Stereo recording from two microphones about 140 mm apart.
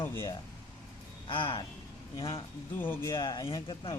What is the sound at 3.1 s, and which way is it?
Speech, 30° left (ahead or behind).